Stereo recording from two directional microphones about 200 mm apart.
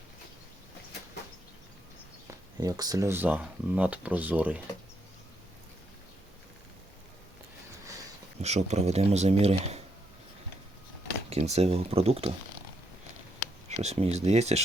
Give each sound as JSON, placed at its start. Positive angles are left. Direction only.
{"t": 2.6, "sound": "speech", "side_deg": -20}
{"t": 8.4, "sound": "speech", "side_deg": -35}
{"t": 11.3, "sound": "speech", "side_deg": -30}
{"t": 13.7, "sound": "speech", "side_deg": -30}